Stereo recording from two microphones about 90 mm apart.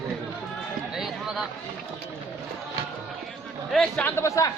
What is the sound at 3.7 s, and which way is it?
Speech, 5° left (ahead or behind).